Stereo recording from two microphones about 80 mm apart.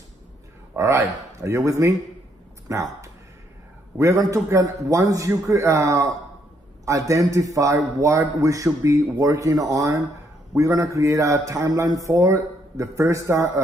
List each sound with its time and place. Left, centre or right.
0.7 s a man's voice: right